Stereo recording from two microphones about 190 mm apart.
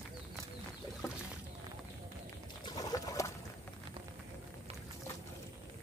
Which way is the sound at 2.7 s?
20° left (ahead or behind).